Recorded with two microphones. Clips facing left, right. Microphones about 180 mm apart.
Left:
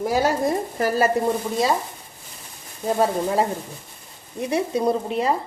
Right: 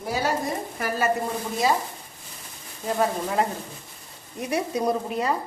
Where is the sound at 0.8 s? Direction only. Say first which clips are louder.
Left 8 dB; 35° left (ahead or behind).